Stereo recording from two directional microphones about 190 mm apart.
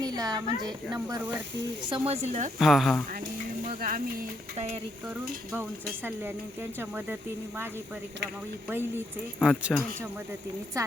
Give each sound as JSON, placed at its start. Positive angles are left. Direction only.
{"t": 0.0, "sound": "a sound", "side_deg": -20}
{"t": 0.9, "sound": "speech", "side_deg": -15}
{"t": 1.9, "sound": "speech", "side_deg": -35}
{"t": 2.6, "sound": "speech", "side_deg": 0}
{"t": 3.7, "sound": "speech", "side_deg": -50}
{"t": 6.1, "sound": "speech", "side_deg": -10}
{"t": 8.7, "sound": "speech", "side_deg": -10}
{"t": 10.8, "sound": "speech", "side_deg": -15}